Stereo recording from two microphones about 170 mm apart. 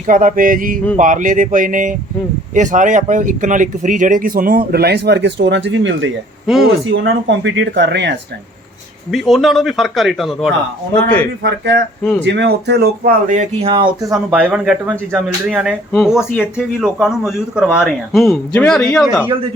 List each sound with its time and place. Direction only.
0.1 s speech: 50° right (ahead or behind); by 6.1 s 90° right
6.9 s speech: 75° right (ahead or behind)
7.3 s speech: 90° right
9.1 s a man's voice: centre (ahead or behind)
11.4 s speech: 90° right; by 13.1 s 75° right (ahead or behind)
13.2 s speech: 45° right (ahead or behind)
13.7 s speech: 30° right (ahead or behind)
14.3 s speech: 5° right (ahead or behind)